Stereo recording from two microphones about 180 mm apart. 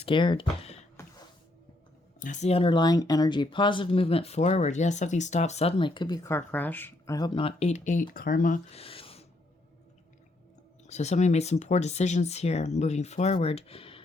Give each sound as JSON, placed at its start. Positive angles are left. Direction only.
{"t": 0.0, "sound": "speech", "side_deg": 25}
{"t": 1.0, "sound": "music", "side_deg": 15}
{"t": 2.1, "sound": "speech", "side_deg": 45}
{"t": 8.7, "sound": "a sound", "side_deg": 30}
{"t": 10.8, "sound": "speech", "side_deg": 40}